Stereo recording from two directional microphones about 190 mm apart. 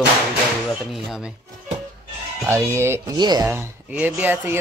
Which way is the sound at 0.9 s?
Centre (ahead or behind).